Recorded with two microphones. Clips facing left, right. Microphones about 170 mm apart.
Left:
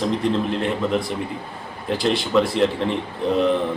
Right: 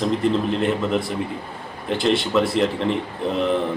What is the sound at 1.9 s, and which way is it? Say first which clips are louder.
A man's voice: right 1 dB; centre (ahead or behind).